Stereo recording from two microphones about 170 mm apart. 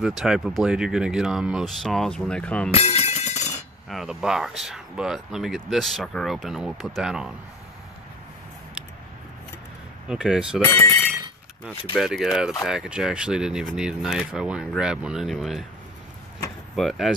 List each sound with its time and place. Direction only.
0.0 s speech: 5° right (ahead or behind)
2.7 s music: 35° left (ahead or behind)
3.9 s speech: centre (ahead or behind)
10.0 s speech: 5° right (ahead or behind)
12.0 s speech: centre (ahead or behind)
16.7 s speech: centre (ahead or behind)